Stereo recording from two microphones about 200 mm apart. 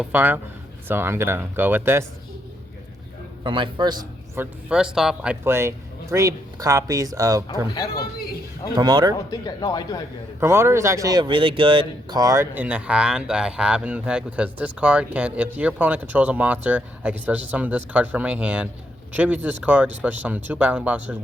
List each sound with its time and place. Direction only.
0.0 s speech: 10° right (ahead or behind)
3.4 s a man's voice: 25° right (ahead or behind)
4.7 s speech: 5° right (ahead or behind)
7.9 s a sound: 50° left (ahead or behind)
8.7 s speech: 20° right (ahead or behind)
9.3 s speech: 20° left (ahead or behind)
10.4 s speech: 15° right (ahead or behind)